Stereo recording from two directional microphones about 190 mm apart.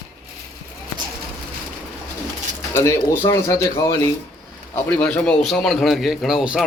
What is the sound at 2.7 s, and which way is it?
A man's voice, 15° left (ahead or behind).